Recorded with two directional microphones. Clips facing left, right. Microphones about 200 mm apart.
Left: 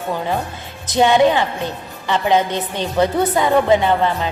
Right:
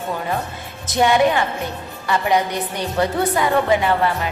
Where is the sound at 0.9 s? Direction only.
20° left (ahead or behind).